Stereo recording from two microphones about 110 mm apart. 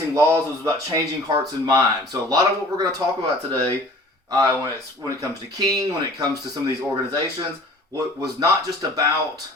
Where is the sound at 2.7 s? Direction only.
35° right (ahead or behind).